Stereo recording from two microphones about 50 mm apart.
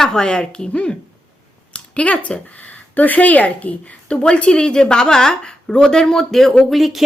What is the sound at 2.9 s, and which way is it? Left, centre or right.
Speech, left.